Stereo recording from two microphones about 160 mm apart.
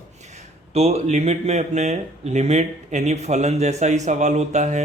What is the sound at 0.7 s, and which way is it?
Speech, 40° right (ahead or behind).